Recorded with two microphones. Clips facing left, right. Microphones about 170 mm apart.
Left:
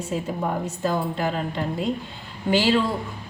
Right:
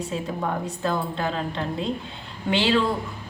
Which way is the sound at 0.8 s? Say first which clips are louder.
Left 2 dB; 10° left (ahead or behind).